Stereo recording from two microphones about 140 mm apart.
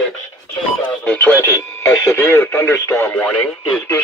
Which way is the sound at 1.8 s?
20° left (ahead or behind).